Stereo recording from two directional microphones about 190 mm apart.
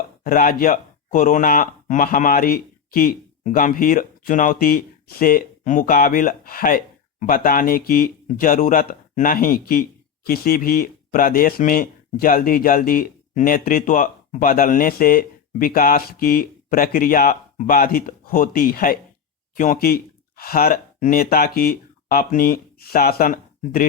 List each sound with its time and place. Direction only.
0.3 s speech: 50° left (ahead or behind)